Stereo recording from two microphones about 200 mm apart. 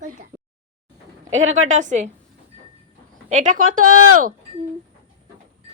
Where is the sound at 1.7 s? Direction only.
40° right (ahead or behind).